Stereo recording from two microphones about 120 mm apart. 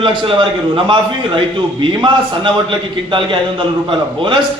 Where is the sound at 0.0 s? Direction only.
45° right (ahead or behind).